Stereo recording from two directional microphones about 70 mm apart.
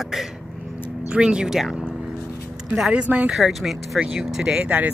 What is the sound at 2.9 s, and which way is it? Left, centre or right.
Speech, centre.